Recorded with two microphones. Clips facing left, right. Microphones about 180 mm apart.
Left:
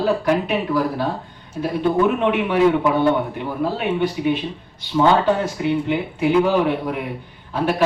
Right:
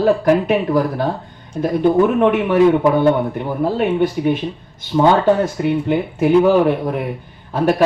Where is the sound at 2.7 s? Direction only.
45° right (ahead or behind).